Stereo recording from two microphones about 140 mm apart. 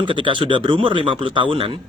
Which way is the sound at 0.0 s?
35° right (ahead or behind).